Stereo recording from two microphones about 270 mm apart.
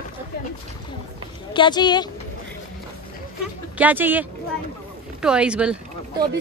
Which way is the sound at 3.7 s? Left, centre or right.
Centre.